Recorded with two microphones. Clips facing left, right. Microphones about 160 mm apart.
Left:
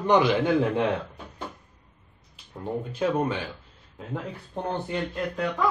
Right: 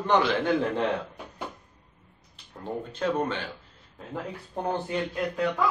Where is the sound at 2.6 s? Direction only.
10° left (ahead or behind).